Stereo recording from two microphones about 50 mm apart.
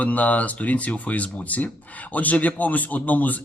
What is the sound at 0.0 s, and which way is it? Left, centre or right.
Speech, left.